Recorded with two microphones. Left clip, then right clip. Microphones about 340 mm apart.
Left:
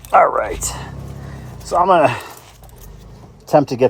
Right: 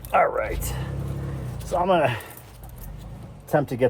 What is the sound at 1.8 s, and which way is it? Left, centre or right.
Speech, left.